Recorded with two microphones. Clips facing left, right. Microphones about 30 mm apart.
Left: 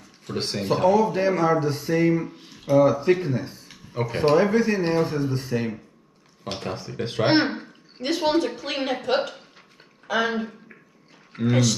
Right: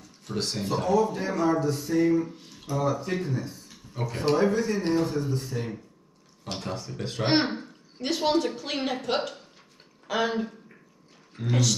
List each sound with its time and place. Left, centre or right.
0.3 s speech: left
2.3 s speech: left
2.7 s speech: left
4.0 s speech: left
4.4 s speech: left
6.4 s speech: left
8.0 s speech: centre
11.3 s speech: left